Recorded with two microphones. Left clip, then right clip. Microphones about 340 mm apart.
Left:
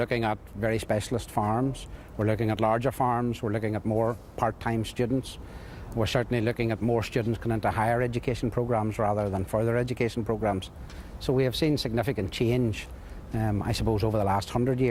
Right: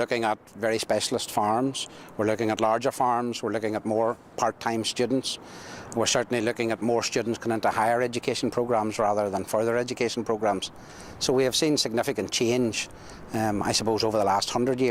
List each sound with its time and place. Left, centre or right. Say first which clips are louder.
0.0 s speech: right 2 dB; left
5.9 s speech: right 3 dB; left